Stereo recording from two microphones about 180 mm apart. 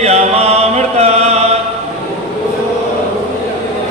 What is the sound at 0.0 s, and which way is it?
Chant, 35° right (ahead or behind).